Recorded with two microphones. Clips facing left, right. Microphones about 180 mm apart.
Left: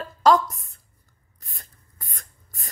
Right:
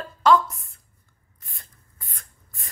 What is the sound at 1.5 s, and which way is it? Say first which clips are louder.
Writing: left 2 dB; 40° left (ahead or behind).